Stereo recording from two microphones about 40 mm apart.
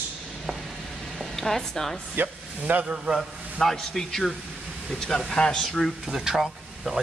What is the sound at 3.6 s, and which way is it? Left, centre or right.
A man's voice, centre.